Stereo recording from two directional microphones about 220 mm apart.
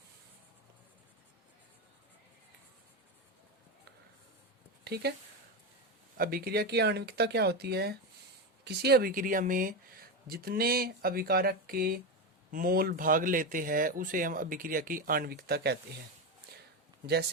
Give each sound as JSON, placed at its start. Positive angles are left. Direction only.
{"t": 4.8, "sound": "speech", "side_deg": -45}
{"t": 6.1, "sound": "speech", "side_deg": -40}